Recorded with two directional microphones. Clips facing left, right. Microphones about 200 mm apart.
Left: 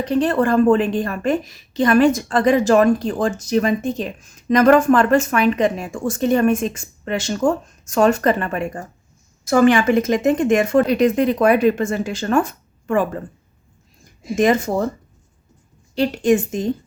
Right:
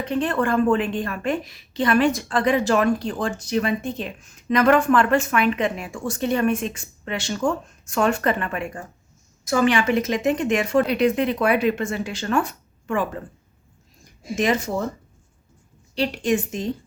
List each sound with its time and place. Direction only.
0.0 s a woman's voice: 40° left (ahead or behind)
9.5 s speech: 50° left (ahead or behind)
14.3 s speech: 50° left (ahead or behind)
16.0 s speech: 45° left (ahead or behind)